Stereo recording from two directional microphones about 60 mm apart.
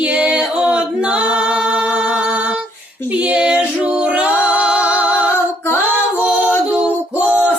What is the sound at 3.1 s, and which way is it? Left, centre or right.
Female singing, right.